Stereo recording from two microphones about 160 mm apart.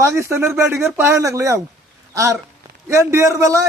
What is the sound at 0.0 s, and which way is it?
Speech, 15° right (ahead or behind).